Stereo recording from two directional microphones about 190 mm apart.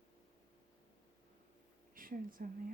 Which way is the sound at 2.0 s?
45° right (ahead or behind).